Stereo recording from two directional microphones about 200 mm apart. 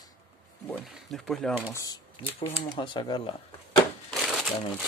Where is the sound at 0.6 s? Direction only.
Centre (ahead or behind).